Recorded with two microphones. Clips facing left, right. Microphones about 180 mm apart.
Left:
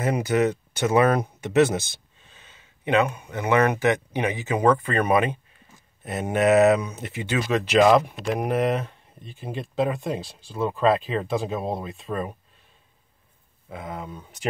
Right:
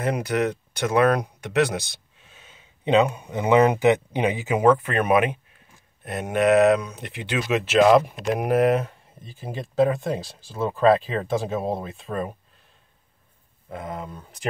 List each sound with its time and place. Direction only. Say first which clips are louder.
0.0 s speech: left 2 dB; 5° left (ahead or behind)
2.3 s a sound: right 2 dB; 10° right (ahead or behind)
2.8 s speech: right 3 dB; 20° right (ahead or behind); by 12.3 s centre (ahead or behind)
13.7 s speech: right 1 dB; centre (ahead or behind)